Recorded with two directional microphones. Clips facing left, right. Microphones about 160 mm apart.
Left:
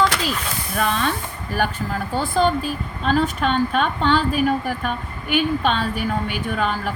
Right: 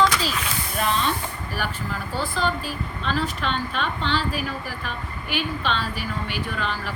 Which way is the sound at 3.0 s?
50° left (ahead or behind).